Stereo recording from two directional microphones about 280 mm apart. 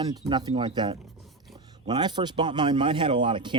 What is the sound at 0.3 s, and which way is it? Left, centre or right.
A man's voice, centre.